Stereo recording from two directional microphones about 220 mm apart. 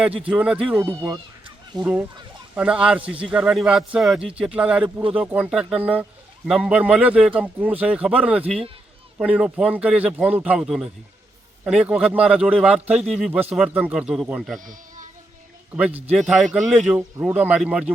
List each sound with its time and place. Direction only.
0.3 s a man's voice: 5° right (ahead or behind)
14.6 s a sound: 35° right (ahead or behind)
15.7 s a man's voice: 5° right (ahead or behind)